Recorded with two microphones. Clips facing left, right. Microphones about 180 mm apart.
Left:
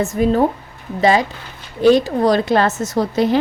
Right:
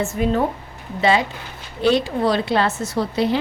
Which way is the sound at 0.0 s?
40° left (ahead or behind).